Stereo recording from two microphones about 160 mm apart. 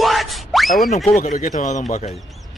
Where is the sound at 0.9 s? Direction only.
45° left (ahead or behind).